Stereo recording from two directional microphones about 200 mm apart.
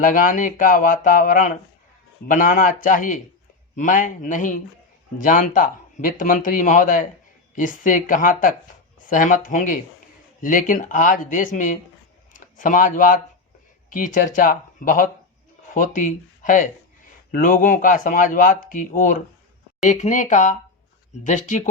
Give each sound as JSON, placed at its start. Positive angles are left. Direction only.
{"t": 0.0, "sound": "speech", "side_deg": 40}